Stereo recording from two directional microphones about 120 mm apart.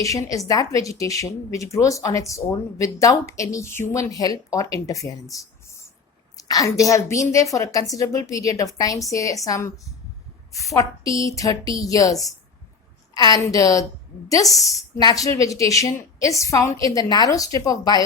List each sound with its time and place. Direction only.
0.0 s a woman's voice: 30° left (ahead or behind)
5.3 s a sound: 25° left (ahead or behind)
6.3 s a woman's voice: 30° left (ahead or behind)
13.1 s a woman's voice: 30° left (ahead or behind)